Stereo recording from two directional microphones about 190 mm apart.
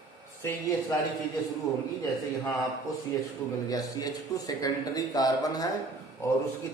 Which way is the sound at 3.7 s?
20° left (ahead or behind).